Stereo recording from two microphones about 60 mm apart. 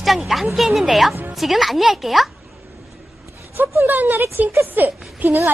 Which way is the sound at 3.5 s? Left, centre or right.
Right.